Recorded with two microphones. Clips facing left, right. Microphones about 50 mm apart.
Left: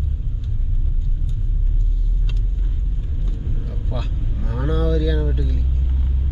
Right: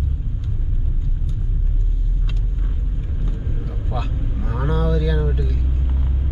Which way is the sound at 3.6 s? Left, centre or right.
Centre.